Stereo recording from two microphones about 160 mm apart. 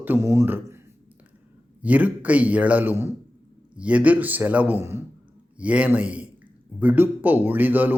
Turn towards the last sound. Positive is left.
turn(degrees=-10)  # may be behind; listen again after turning